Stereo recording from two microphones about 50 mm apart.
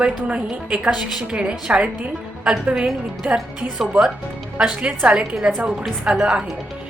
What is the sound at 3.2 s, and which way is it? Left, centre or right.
Speech, right.